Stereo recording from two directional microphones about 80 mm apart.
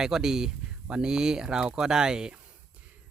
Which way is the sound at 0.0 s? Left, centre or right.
Centre.